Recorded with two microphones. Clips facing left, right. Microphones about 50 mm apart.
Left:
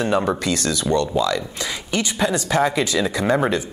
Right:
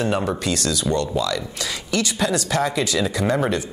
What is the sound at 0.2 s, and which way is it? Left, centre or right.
Speech, left.